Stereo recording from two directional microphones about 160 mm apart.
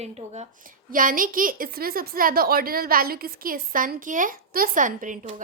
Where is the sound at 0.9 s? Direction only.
60° right (ahead or behind).